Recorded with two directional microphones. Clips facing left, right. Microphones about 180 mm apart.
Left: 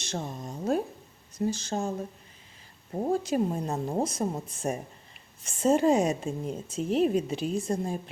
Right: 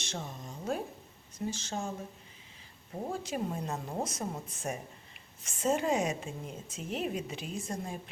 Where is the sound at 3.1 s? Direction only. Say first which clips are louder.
Left 9 dB; 40° left (ahead or behind).